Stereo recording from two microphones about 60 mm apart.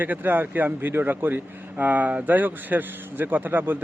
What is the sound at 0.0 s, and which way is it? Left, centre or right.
A man's voice, right.